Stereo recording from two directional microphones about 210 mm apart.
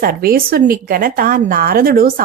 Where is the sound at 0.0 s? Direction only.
45° right (ahead or behind).